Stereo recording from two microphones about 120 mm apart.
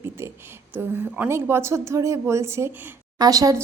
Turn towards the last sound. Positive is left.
turn(degrees=-30)  # may be behind; listen again after turning